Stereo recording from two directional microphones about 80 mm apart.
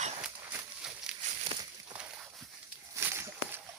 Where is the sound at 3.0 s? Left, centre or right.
Right.